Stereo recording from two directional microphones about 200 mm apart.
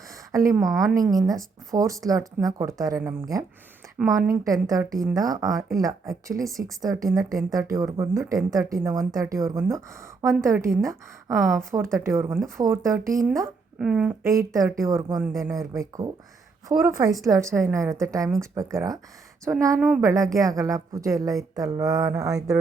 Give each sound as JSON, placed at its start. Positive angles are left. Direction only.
{"t": 0.3, "sound": "speech", "side_deg": -15}
{"t": 13.7, "sound": "a woman's voice", "side_deg": -5}